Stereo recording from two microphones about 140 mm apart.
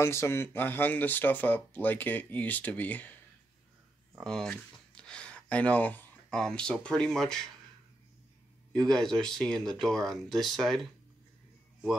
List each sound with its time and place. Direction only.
0.0 s speech: 20° left (ahead or behind)
4.2 s speech: 5° left (ahead or behind)
8.7 s speech: 5° left (ahead or behind)